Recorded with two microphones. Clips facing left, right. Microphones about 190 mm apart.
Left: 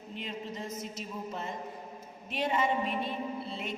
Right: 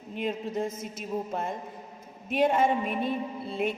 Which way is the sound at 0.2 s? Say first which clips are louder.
Right 10 dB; 50° right (ahead or behind).